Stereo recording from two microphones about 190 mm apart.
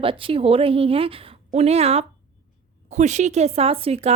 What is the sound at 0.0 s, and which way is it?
A woman's voice, 30° right (ahead or behind).